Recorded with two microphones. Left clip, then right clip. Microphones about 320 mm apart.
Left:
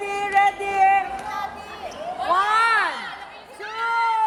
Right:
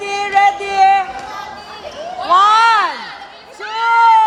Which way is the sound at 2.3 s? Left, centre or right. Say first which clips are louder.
Right 9 dB; right.